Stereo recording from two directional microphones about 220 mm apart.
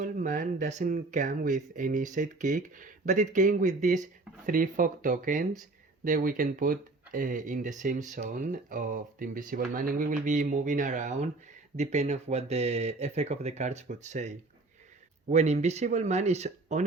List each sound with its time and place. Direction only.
0.0 s speech: 35° right (ahead or behind)